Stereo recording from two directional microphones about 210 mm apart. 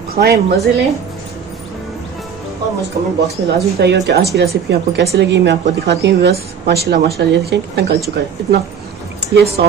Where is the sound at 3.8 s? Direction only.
55° right (ahead or behind).